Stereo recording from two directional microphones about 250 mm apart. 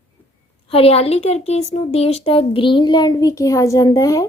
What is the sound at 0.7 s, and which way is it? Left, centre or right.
Speech, left.